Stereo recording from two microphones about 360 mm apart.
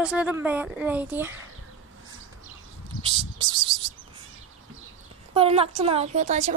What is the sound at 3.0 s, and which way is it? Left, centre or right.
Bird, centre.